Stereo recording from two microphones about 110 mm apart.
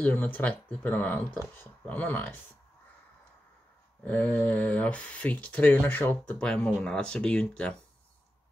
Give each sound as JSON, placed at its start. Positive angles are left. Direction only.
{"t": 0.0, "sound": "speech", "side_deg": 15}
{"t": 4.0, "sound": "speech", "side_deg": 15}